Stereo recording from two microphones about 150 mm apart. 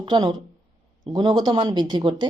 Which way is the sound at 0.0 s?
30° right (ahead or behind).